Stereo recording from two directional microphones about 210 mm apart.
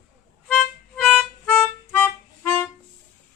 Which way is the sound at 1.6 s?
10° left (ahead or behind).